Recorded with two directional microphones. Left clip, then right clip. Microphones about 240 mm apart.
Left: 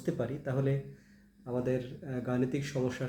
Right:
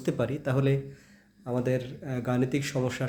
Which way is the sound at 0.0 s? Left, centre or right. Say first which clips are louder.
Right 6 dB; right.